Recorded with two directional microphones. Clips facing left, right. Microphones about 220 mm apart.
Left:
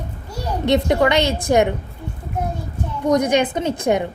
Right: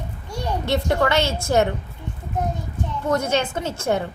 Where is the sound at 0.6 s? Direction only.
20° left (ahead or behind).